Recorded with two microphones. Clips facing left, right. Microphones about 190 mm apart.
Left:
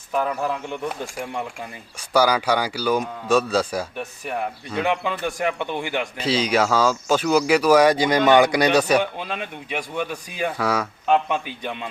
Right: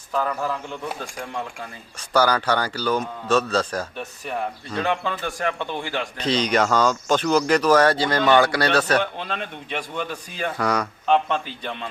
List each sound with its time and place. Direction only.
0.1 s speech: 15° left (ahead or behind)